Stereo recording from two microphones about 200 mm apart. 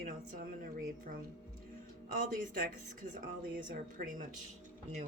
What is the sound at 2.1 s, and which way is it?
Speech, 45° right (ahead or behind).